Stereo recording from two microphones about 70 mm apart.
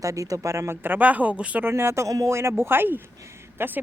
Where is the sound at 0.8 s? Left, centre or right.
Right.